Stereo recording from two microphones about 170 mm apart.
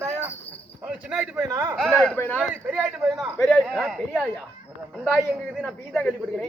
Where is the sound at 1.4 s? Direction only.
20° right (ahead or behind).